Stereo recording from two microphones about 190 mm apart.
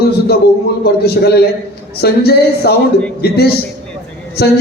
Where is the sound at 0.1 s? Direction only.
55° left (ahead or behind).